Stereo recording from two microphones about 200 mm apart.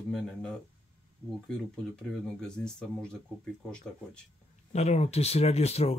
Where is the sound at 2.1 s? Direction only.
5° left (ahead or behind).